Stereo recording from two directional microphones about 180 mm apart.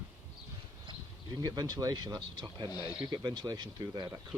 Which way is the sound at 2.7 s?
20° left (ahead or behind).